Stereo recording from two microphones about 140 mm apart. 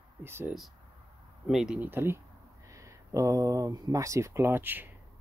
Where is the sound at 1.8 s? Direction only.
15° right (ahead or behind).